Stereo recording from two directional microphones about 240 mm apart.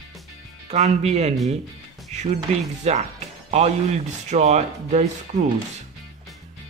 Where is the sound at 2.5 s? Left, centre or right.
Right.